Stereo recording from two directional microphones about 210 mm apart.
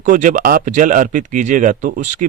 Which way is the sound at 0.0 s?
35° right (ahead or behind).